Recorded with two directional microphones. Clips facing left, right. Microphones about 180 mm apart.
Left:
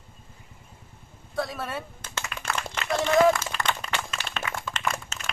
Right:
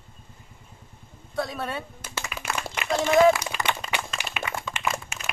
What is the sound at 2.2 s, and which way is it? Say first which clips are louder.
Clapping: even; 5° right (ahead or behind).